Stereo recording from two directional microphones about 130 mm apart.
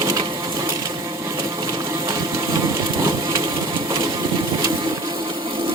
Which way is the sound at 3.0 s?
25° right (ahead or behind).